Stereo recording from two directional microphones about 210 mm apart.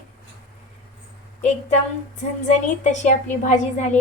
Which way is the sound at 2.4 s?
35° left (ahead or behind).